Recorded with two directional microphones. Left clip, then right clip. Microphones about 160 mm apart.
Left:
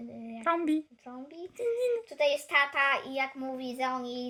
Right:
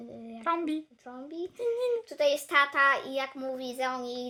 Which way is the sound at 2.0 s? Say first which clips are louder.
Right 1 dB; 30° right (ahead or behind).